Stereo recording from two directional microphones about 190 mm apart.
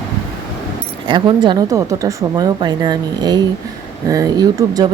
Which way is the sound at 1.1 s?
25° right (ahead or behind).